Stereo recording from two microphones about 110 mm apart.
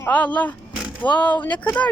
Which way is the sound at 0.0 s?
15° left (ahead or behind).